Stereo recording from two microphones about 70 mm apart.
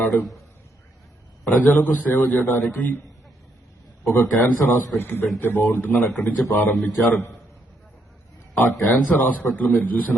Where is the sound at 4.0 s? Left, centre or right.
Left.